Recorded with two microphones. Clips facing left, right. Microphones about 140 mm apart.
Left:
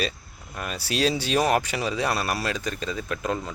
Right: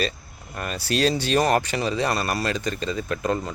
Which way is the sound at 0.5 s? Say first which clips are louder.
Right 3 dB; 5° left (ahead or behind).